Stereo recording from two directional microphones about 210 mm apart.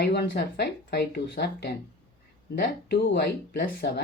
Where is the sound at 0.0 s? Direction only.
50° left (ahead or behind).